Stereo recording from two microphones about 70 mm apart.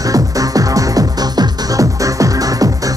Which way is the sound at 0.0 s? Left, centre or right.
Right.